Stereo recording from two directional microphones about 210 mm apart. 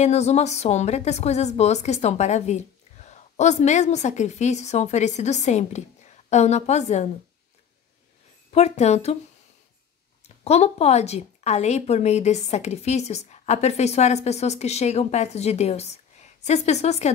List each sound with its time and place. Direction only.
0.0 s a woman's voice: 30° left (ahead or behind)
8.5 s a woman's voice: 30° left (ahead or behind)
10.2 s a woman's voice: 30° left (ahead or behind)